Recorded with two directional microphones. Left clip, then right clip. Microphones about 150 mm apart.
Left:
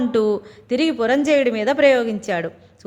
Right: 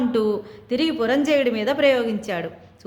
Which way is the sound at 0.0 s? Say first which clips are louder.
Left 3 dB; 40° left (ahead or behind).